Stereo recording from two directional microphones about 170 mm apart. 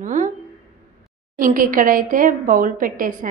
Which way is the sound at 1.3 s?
55° right (ahead or behind).